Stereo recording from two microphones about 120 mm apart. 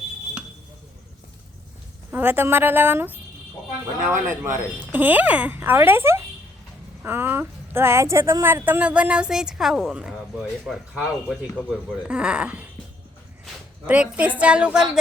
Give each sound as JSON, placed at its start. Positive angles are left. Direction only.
{"t": 2.0, "sound": "speech", "side_deg": -15}
{"t": 13.8, "sound": "speech", "side_deg": -10}